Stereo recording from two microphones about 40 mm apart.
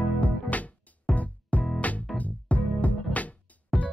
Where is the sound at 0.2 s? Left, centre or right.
Left.